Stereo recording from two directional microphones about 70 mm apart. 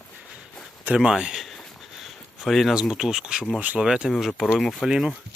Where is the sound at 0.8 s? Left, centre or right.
Centre.